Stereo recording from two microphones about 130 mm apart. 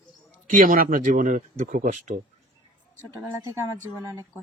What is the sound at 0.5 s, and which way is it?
Speech, 90° right.